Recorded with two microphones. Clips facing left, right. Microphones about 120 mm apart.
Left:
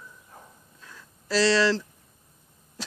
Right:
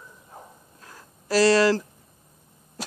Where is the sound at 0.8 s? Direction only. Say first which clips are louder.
Right 1 dB; 45° right (ahead or behind).